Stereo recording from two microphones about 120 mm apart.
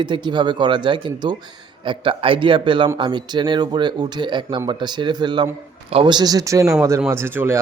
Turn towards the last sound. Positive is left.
turn(degrees=-20)  # may be behind; listen again after turning